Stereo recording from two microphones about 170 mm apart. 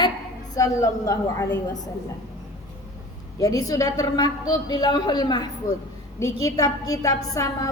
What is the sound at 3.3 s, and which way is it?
A woman's voice, 20° left (ahead or behind).